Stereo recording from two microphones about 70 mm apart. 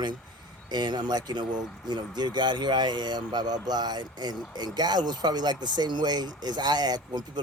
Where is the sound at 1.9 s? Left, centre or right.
Right.